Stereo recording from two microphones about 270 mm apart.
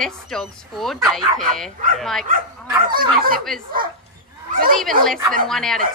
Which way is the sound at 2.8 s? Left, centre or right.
Right.